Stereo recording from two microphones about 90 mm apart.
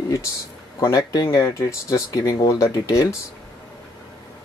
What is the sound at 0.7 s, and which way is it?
Speech, 35° left (ahead or behind).